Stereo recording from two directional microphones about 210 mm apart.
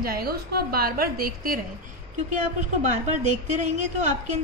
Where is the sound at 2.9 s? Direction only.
35° right (ahead or behind).